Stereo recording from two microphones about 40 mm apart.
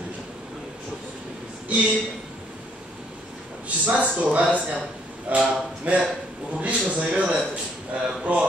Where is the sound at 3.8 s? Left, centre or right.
Right.